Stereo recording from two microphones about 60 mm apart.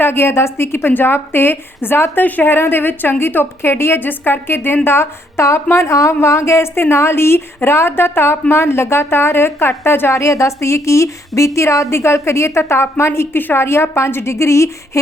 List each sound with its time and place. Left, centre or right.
0.0 s a woman's voice: left
10.1 s a woman's voice: left